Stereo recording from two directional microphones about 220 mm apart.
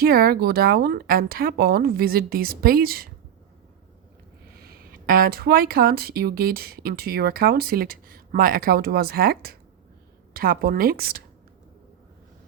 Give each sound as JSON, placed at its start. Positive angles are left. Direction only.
{"t": 0.0, "sound": "speech", "side_deg": -40}
{"t": 4.5, "sound": "speech", "side_deg": -45}